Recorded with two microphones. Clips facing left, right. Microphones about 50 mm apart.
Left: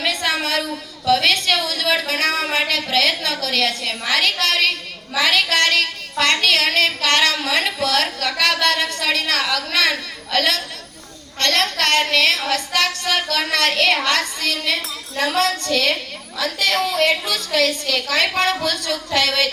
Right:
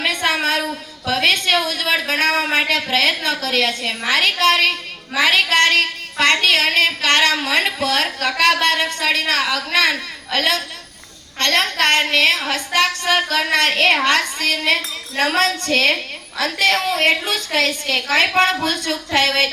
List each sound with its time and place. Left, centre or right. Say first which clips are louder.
0.0 s a woman's voice: right 2 dB; right